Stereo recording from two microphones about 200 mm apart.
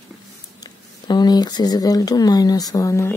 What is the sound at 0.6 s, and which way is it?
Speech, 20° left (ahead or behind).